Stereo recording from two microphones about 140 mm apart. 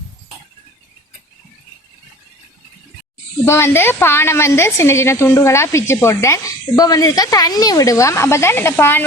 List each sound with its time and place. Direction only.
3.4 s a woman's voice: 20° left (ahead or behind)